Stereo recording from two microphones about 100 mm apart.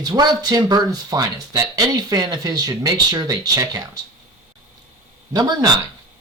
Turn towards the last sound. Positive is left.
turn(degrees=-40)  # may be behind; listen again after turning